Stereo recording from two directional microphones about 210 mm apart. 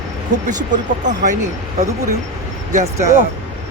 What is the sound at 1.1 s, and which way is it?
Speech, 35° right (ahead or behind).